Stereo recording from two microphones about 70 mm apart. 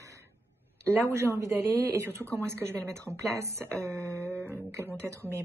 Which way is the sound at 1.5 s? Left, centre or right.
Right.